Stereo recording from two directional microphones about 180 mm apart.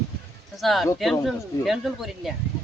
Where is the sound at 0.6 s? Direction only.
Centre (ahead or behind).